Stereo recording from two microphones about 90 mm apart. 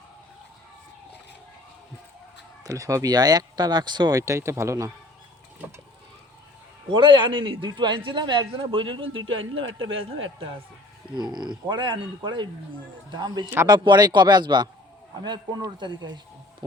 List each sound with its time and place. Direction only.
2.6 s speech: 35° right (ahead or behind); by 4.2 s 55° right (ahead or behind)
4.2 s speech: 35° right (ahead or behind)
6.9 s a man's voice: 60° right (ahead or behind)
11.1 s a man's voice: 55° right (ahead or behind)